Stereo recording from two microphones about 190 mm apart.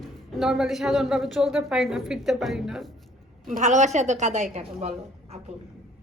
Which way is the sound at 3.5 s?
40° right (ahead or behind).